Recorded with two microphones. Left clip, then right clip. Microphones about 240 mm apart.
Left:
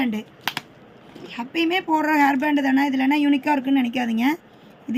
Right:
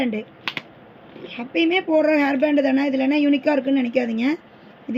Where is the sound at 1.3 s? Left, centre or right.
Left.